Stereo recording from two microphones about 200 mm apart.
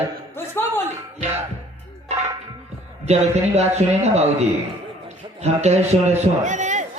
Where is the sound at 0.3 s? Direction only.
10° left (ahead or behind).